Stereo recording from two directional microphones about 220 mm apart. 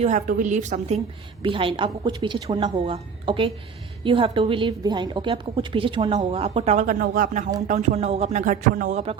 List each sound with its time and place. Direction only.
0.0 s a woman's voice: 35° right (ahead or behind)